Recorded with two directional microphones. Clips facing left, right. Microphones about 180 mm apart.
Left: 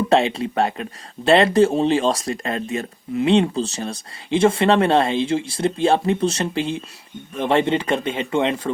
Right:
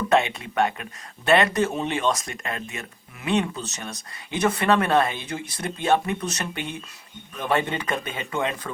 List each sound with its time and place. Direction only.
0.1 s speech: 30° left (ahead or behind)